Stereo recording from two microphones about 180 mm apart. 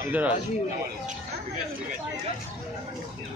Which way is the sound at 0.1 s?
10° right (ahead or behind).